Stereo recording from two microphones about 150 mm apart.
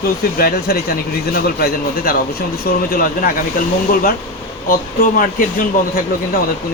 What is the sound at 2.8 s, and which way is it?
Speech, 75° left (ahead or behind).